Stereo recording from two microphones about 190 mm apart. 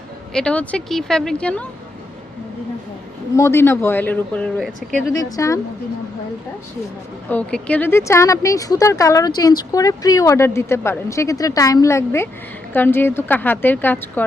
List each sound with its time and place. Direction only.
0.3 s speech: 5° left (ahead or behind)
3.3 s a woman's voice: 15° left (ahead or behind)
5.1 s a woman's voice: 15° left (ahead or behind)
7.3 s a woman's voice: 10° left (ahead or behind)